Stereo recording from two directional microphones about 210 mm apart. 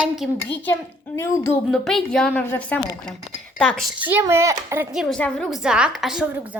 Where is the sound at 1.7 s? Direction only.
Centre (ahead or behind).